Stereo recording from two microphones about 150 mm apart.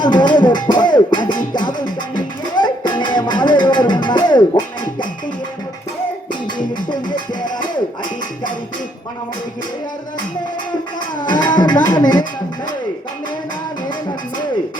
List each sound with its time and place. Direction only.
0.0 s music: 30° left (ahead or behind)
6.9 s music: 30° left (ahead or behind)
11.3 s music: 30° left (ahead or behind)